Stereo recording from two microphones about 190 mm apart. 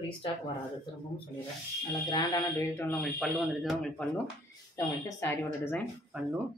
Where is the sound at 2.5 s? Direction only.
10° left (ahead or behind).